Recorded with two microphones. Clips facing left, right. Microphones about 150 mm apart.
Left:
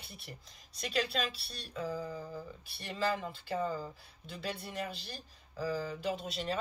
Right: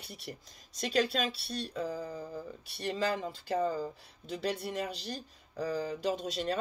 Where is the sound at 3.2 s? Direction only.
40° right (ahead or behind).